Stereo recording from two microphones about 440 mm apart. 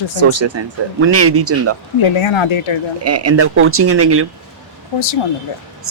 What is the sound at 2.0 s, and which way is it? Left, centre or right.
Speech, left.